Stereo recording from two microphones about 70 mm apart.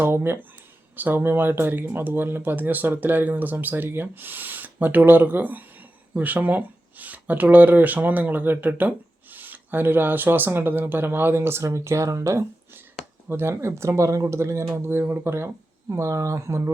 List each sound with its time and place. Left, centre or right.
0.0 s speech: right
13.2 s speech: right